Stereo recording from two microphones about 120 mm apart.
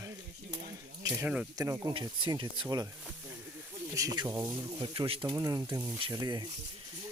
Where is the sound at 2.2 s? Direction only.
40° right (ahead or behind).